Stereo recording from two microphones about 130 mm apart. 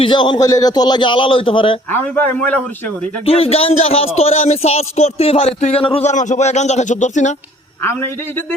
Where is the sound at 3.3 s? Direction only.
50° left (ahead or behind).